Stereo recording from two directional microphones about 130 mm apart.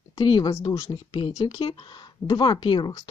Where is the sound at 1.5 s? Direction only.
40° left (ahead or behind).